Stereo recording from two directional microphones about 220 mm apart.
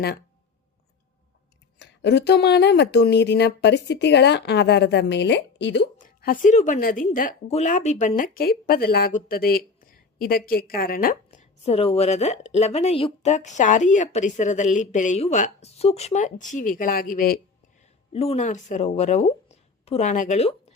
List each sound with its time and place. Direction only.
1.8 s speech: 50° left (ahead or behind)
6.0 s speech: 35° left (ahead or behind)
18.1 s speech: 25° left (ahead or behind)